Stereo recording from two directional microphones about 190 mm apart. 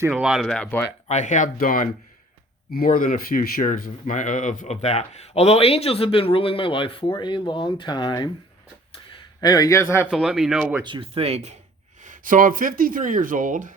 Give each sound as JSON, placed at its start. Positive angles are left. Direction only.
{"t": 0.1, "sound": "speech", "side_deg": -5}
{"t": 1.0, "sound": "speech", "side_deg": 40}
{"t": 9.4, "sound": "a man's voice", "side_deg": 20}
{"t": 10.1, "sound": "speech", "side_deg": 0}
{"t": 10.8, "sound": "speech", "side_deg": -25}
{"t": 12.0, "sound": "speech", "side_deg": -45}